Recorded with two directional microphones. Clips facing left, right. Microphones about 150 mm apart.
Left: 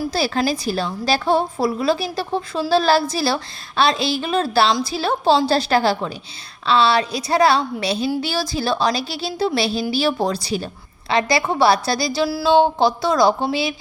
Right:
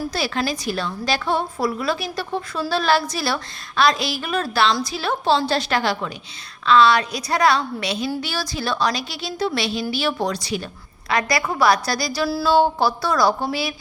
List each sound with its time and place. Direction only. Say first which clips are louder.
0.1 s a woman's voice: left 4 dB; 35° left (ahead or behind)